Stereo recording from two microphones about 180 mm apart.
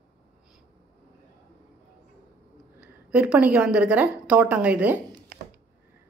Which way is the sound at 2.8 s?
5° right (ahead or behind).